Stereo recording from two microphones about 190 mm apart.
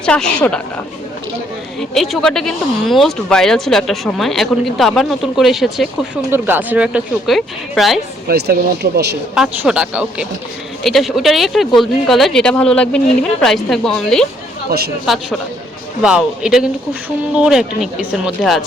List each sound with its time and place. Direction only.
0.0 s speech: 5° left (ahead or behind)
1.8 s speech: centre (ahead or behind)
8.3 s speech: 60° right (ahead or behind)
9.3 s speech: 5° right (ahead or behind)
14.7 s speech: 55° right (ahead or behind)
15.0 s speech: centre (ahead or behind)